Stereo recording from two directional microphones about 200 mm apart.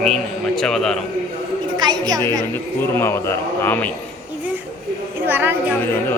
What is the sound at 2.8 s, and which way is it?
A man's voice, 10° left (ahead or behind).